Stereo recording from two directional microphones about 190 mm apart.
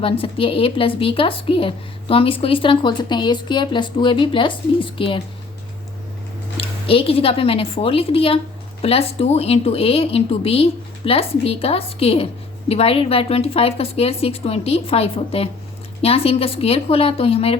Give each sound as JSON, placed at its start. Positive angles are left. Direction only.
{"t": 0.0, "sound": "a woman's voice", "side_deg": 30}
{"t": 6.6, "sound": "a woman's voice", "side_deg": 30}